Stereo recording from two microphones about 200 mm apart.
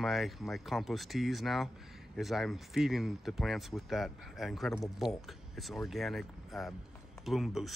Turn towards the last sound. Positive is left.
turn(degrees=0)  # may be behind; listen again after turning